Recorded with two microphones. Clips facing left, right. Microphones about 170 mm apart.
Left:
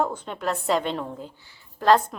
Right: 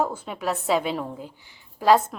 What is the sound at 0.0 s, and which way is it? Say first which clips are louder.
A woman's voice: even; 5° right (ahead or behind).